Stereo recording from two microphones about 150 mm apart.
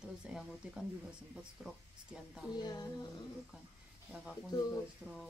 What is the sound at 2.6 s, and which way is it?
Speech, 25° left (ahead or behind).